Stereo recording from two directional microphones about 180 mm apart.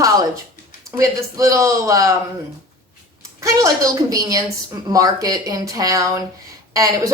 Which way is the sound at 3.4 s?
15° right (ahead or behind).